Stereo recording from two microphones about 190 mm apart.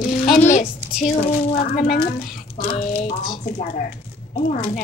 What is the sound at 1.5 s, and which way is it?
Speech, 50° left (ahead or behind).